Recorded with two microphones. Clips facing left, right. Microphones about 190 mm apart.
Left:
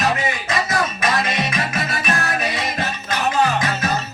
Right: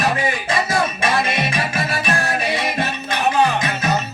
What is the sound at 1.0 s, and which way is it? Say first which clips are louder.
Music: right 1 dB; 30° right (ahead or behind).